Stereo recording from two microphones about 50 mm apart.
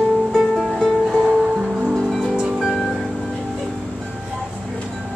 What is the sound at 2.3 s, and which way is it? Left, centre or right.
Music, centre.